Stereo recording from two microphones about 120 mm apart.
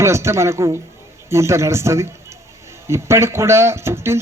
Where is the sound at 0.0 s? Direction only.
25° right (ahead or behind).